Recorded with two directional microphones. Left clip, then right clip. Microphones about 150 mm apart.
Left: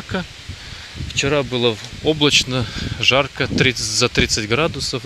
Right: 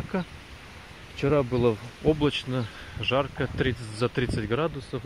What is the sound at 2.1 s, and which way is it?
Speech, 20° left (ahead or behind).